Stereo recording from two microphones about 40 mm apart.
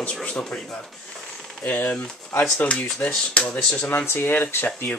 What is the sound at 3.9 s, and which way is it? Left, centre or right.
Speech, left.